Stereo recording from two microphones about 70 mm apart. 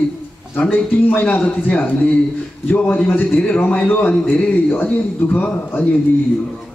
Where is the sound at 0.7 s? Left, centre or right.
Left.